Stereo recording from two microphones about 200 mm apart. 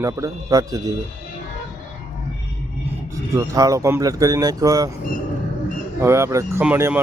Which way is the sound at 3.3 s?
15° right (ahead or behind).